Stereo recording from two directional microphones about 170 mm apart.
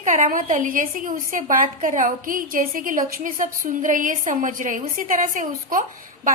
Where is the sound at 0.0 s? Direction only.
50° right (ahead or behind).